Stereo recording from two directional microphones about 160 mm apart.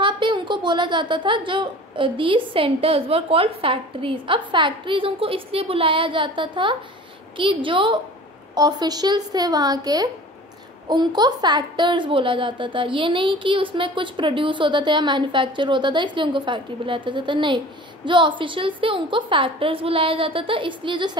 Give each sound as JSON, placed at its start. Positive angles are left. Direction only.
{"t": 0.0, "sound": "a woman's voice", "side_deg": -30}